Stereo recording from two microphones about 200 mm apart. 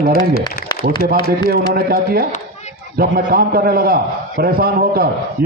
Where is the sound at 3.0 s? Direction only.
45° right (ahead or behind).